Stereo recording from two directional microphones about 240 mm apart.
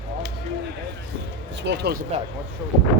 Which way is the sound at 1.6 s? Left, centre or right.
Right.